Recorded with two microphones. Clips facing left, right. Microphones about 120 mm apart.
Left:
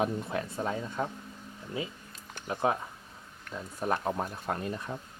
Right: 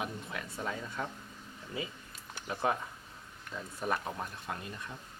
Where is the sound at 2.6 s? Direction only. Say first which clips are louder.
Left 3 dB; 20° left (ahead or behind).